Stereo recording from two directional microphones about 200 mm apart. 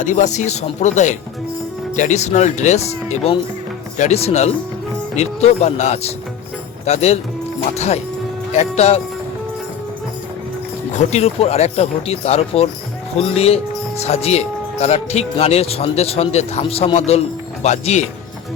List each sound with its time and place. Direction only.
0.0 s speech: 40° left (ahead or behind)
8.5 s speech: 35° left (ahead or behind)
10.9 s speech: 30° left (ahead or behind)